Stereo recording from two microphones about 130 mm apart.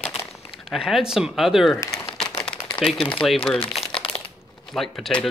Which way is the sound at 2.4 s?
5° left (ahead or behind).